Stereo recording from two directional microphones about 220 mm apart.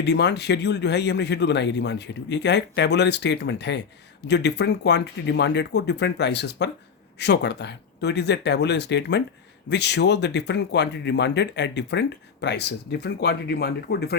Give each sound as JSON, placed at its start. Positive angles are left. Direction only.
{"t": 0.0, "sound": "speech", "side_deg": 50}